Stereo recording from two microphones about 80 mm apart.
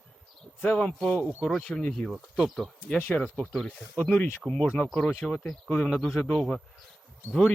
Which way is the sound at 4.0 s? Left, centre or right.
Centre.